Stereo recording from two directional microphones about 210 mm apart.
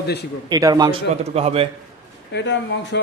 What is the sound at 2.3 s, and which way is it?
Speech, 55° left (ahead or behind).